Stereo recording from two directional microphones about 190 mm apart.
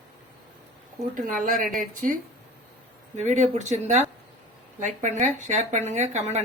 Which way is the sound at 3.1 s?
40° right (ahead or behind).